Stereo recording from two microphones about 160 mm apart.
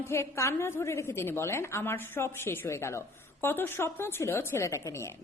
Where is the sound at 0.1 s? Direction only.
15° left (ahead or behind).